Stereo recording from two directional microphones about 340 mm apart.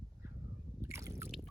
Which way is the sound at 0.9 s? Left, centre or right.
Centre.